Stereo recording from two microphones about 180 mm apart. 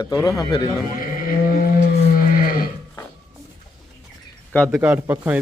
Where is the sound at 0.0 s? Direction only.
20° left (ahead or behind).